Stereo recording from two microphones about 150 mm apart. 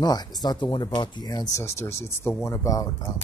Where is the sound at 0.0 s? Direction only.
25° left (ahead or behind).